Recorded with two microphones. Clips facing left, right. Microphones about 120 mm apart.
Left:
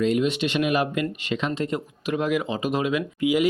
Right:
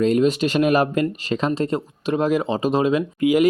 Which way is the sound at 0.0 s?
40° right (ahead or behind).